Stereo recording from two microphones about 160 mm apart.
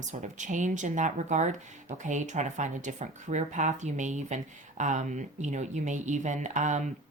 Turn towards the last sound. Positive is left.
turn(degrees=-50)  # may be behind; listen again after turning